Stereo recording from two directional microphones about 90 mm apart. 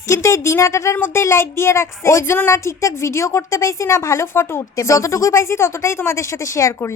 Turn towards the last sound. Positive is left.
turn(degrees=35)  # may be behind; listen again after turning